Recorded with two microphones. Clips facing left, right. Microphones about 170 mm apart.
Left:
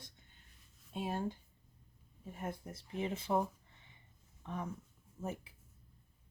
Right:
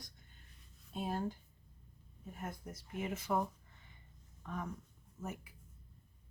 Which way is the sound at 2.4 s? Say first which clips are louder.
Left 3 dB; 30° left (ahead or behind).